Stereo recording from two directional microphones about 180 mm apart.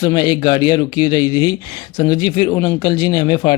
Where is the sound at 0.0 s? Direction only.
20° left (ahead or behind).